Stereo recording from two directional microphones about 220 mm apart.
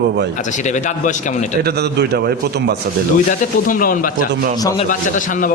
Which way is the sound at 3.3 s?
40° left (ahead or behind).